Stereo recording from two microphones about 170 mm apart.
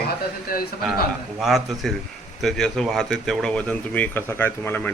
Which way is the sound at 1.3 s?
Centre (ahead or behind).